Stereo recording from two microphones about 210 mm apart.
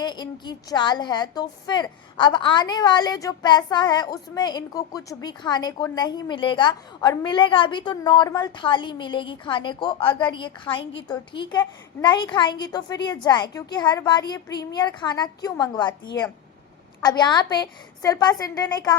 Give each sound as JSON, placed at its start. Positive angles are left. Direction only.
{"t": 0.0, "sound": "a woman's voice", "side_deg": 20}